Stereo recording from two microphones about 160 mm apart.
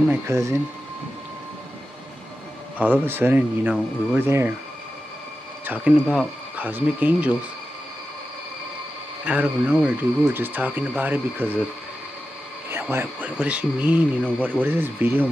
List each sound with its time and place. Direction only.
0.1 s speech: 20° right (ahead or behind)
2.8 s speech: 10° right (ahead or behind)
5.7 s speech: 5° right (ahead or behind)
9.2 s speech: 10° right (ahead or behind)
12.9 s speech: 10° right (ahead or behind)